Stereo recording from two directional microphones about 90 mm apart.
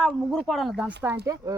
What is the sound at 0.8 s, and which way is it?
Speech, 20° right (ahead or behind).